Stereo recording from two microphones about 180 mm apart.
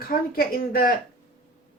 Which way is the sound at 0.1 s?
55° left (ahead or behind).